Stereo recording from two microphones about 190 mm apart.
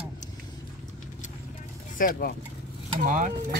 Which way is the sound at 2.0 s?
50° left (ahead or behind).